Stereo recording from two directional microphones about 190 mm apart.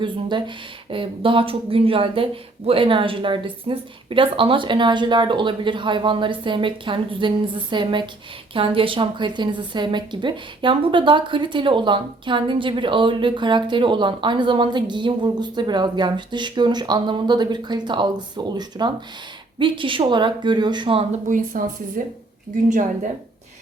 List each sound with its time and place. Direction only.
0.0 s a woman's voice: 25° right (ahead or behind)
21.2 s a woman's voice: 45° right (ahead or behind)